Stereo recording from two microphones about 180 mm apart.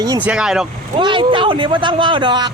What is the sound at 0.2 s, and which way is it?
Speech, 5° right (ahead or behind).